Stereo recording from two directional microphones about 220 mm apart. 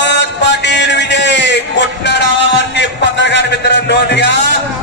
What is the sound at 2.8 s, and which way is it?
Music, 50° left (ahead or behind).